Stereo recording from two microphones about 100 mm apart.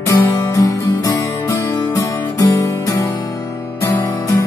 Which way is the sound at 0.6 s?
35° left (ahead or behind).